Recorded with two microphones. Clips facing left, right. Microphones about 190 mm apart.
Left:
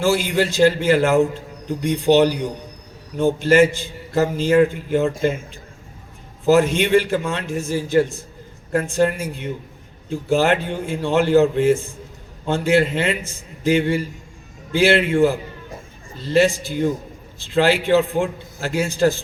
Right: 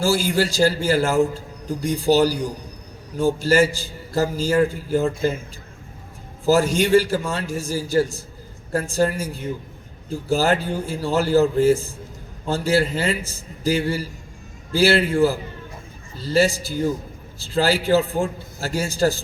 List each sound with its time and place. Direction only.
0.0 s a man's voice: 35° right (ahead or behind)
6.5 s a man's voice: 40° right (ahead or behind)